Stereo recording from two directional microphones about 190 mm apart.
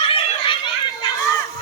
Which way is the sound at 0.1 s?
30° left (ahead or behind).